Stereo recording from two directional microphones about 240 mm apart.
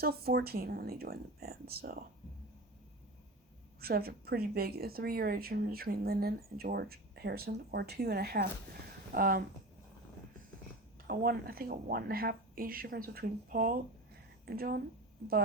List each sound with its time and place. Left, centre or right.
0.0 s speech: right
3.8 s speech: right
11.0 s speech: right